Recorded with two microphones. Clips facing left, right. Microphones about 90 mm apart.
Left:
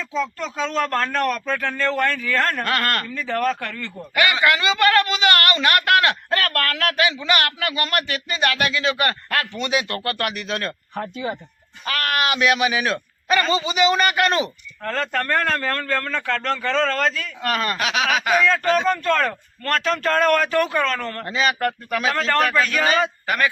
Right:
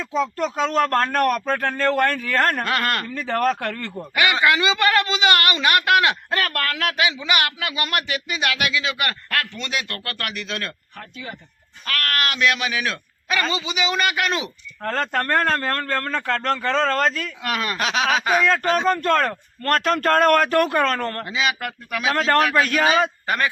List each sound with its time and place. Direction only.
0.3 s speech: 50° right (ahead or behind)
2.6 s a man's voice: 15° right (ahead or behind)
3.2 s speech: 50° right (ahead or behind)
3.9 s a man's voice: 15° right (ahead or behind); by 10.8 s 5° left (ahead or behind)
10.9 s speech: 25° left (ahead or behind)
11.9 s speech: 10° left (ahead or behind)
14.8 s a man's voice: 40° right (ahead or behind)
17.4 s speech: 5° right (ahead or behind)
17.7 s speech: 35° right (ahead or behind)
18.9 s speech: 40° right (ahead or behind)
21.2 s a man's voice: 5° right (ahead or behind)
23.2 s a man's voice: 30° right (ahead or behind)